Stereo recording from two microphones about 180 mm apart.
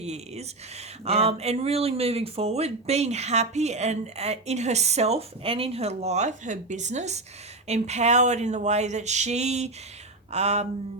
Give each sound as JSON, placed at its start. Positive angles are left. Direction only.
{"t": 0.0, "sound": "speech", "side_deg": -35}